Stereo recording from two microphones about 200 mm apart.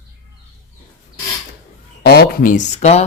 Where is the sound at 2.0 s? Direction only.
50° left (ahead or behind); by 3.1 s 35° left (ahead or behind).